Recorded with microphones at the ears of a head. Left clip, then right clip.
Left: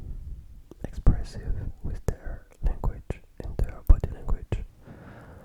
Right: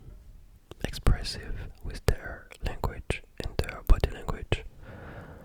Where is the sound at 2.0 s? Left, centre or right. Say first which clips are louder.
Right 6 dB; right.